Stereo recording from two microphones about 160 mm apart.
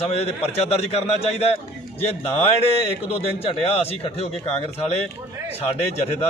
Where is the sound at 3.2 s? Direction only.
40° left (ahead or behind).